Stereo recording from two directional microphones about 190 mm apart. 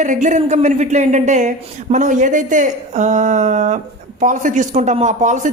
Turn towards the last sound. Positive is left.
turn(degrees=-40)  # may be behind; listen again after turning